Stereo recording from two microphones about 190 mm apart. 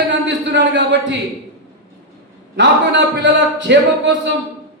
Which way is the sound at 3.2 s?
70° right (ahead or behind).